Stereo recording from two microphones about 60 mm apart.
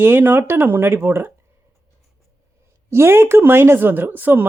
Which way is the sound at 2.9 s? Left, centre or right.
Right.